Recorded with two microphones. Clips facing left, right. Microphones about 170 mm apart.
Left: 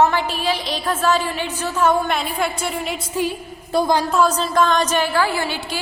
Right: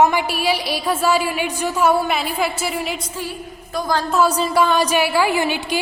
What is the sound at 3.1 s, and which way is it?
Speech, 20° left (ahead or behind).